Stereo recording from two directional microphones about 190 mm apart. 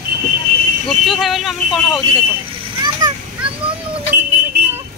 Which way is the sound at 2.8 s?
25° right (ahead or behind).